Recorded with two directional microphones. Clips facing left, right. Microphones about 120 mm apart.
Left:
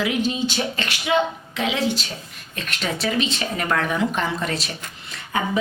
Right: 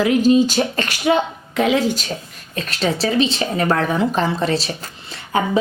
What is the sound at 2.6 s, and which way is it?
A woman's voice, 35° right (ahead or behind).